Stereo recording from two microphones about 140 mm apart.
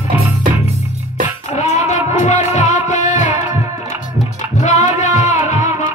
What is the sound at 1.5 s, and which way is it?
Music, 55° left (ahead or behind).